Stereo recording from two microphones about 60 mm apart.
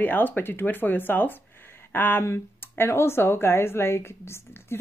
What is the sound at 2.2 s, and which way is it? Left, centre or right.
Speech, left.